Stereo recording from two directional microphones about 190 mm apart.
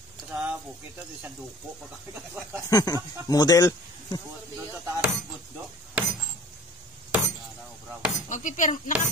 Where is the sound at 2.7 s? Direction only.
20° left (ahead or behind).